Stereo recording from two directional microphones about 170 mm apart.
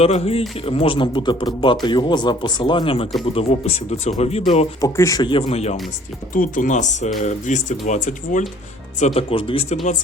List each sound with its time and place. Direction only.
0.0 s speech: 35° left (ahead or behind)
4.8 s speech: 20° left (ahead or behind); by 5.7 s 40° left (ahead or behind)
6.3 s speech: 50° left (ahead or behind); by 9.7 s 35° left (ahead or behind)